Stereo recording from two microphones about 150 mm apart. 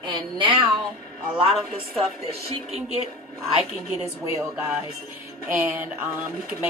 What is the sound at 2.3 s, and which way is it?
Speech, 45° right (ahead or behind).